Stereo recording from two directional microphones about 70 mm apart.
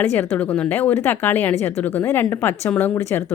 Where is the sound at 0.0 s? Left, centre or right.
Left.